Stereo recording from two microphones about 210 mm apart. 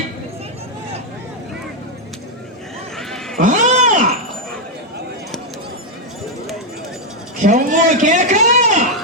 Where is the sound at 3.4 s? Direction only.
35° right (ahead or behind).